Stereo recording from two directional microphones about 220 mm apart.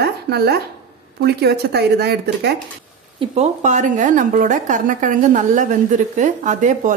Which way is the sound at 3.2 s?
30° right (ahead or behind).